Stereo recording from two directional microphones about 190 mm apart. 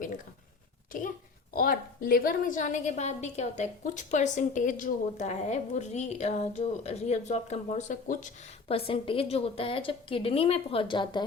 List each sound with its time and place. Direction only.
1.5 s a woman's voice: 50° left (ahead or behind); by 11.3 s 25° left (ahead or behind)